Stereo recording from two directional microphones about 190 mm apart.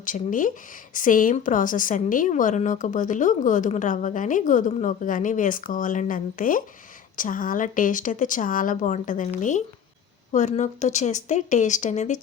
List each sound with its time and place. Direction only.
0.0 s a woman's voice: 45° left (ahead or behind)